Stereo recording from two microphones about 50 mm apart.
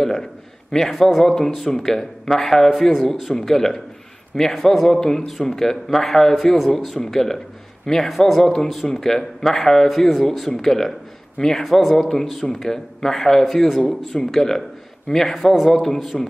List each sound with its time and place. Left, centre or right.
0.0 s a man's voice: centre